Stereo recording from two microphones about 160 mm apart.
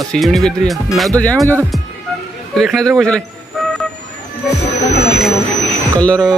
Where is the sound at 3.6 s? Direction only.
Centre (ahead or behind).